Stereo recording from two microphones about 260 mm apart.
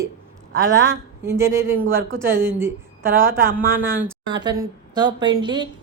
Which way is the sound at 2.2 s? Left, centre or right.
Centre.